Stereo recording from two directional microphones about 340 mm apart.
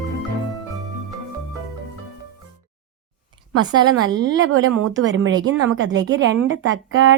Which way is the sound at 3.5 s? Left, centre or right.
Centre.